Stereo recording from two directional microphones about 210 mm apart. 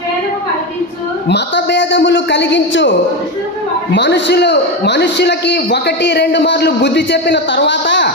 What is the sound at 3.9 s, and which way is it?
A man's voice, 55° left (ahead or behind).